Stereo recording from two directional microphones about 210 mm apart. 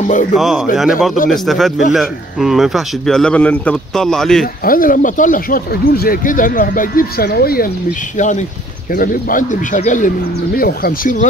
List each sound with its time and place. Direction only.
0.0 s speech: 35° left (ahead or behind)
0.3 s speech: centre (ahead or behind)
4.6 s speech: 40° left (ahead or behind)